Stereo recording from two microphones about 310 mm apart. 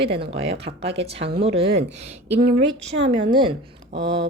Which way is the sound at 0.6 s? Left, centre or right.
Centre.